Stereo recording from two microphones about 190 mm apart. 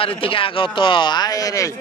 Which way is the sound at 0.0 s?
30° left (ahead or behind).